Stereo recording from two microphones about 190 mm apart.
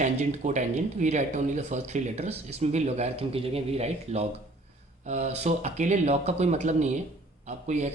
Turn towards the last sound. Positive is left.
turn(degrees=-35)  # may be behind; listen again after turning